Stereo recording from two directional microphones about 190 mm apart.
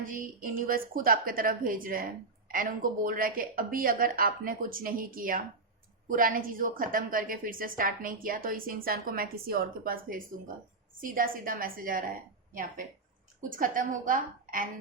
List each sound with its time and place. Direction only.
0.0 s a woman's voice: 45° right (ahead or behind)